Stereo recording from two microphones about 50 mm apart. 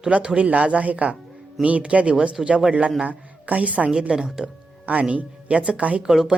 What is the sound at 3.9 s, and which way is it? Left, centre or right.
Speech, centre.